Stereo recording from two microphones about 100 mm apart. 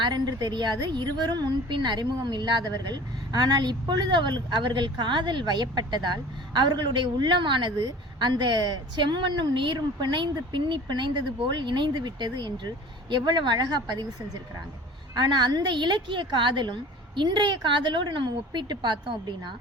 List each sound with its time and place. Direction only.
0.0 s a woman's voice: 45° right (ahead or behind)
15.1 s a woman's voice: 45° right (ahead or behind)